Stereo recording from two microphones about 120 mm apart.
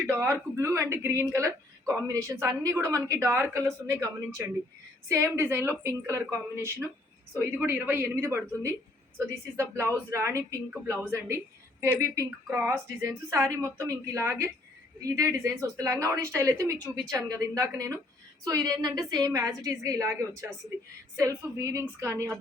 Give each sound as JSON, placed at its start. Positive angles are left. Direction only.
{"t": 0.0, "sound": "a woman's voice", "side_deg": -20}